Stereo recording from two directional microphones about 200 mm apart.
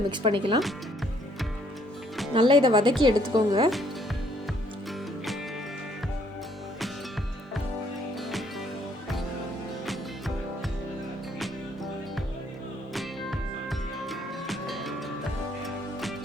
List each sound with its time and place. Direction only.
0.1 s a woman's voice: 25° right (ahead or behind)
2.3 s a woman's voice: 25° right (ahead or behind)
9.8 s music: centre (ahead or behind)
12.9 s music: centre (ahead or behind)